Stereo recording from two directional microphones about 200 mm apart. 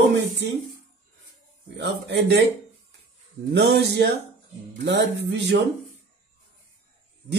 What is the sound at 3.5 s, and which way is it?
Speech, 55° right (ahead or behind).